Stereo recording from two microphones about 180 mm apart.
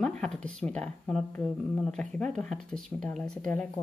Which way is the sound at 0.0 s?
5° left (ahead or behind).